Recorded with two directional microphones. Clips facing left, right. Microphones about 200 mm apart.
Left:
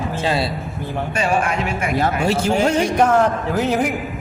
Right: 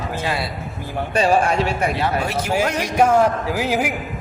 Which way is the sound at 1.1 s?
35° right (ahead or behind).